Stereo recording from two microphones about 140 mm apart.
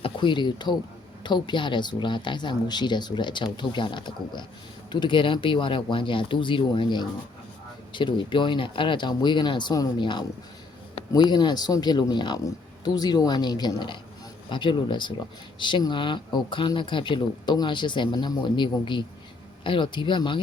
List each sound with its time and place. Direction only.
0.0 s speech: 35° left (ahead or behind)